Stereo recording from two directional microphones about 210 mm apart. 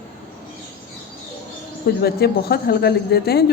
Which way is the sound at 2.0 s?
50° left (ahead or behind).